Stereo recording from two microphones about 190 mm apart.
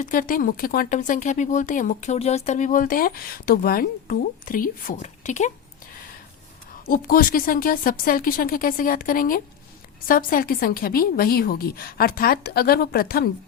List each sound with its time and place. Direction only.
0.0 s speech: 45° left (ahead or behind)
6.8 s speech: 50° left (ahead or behind)